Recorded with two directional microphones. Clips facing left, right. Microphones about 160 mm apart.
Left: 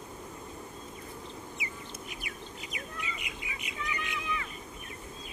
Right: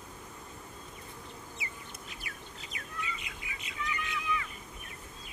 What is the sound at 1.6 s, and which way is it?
Bird, 15° left (ahead or behind).